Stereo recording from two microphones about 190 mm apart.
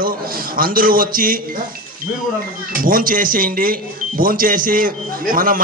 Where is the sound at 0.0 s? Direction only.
50° right (ahead or behind).